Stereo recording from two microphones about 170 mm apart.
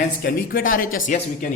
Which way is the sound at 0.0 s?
55° left (ahead or behind).